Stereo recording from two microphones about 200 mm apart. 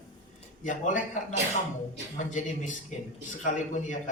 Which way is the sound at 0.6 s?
40° left (ahead or behind).